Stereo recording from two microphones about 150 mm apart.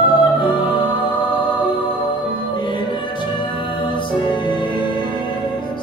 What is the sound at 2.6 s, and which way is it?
Music, 30° left (ahead or behind).